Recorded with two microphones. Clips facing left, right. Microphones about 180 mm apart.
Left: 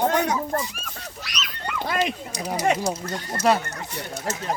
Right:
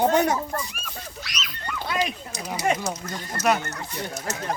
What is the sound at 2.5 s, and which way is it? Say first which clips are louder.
Speech: left 2 dB; 40° left (ahead or behind).